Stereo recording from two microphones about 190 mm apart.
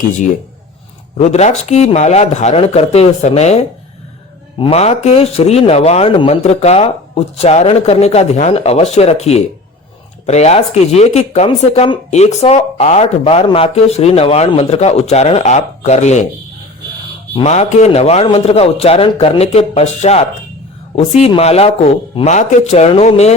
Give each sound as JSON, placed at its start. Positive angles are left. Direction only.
{"t": 1.1, "sound": "speech", "side_deg": 35}
{"t": 17.3, "sound": "speech", "side_deg": 35}